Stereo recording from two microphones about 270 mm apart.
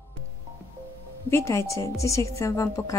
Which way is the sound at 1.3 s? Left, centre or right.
Centre.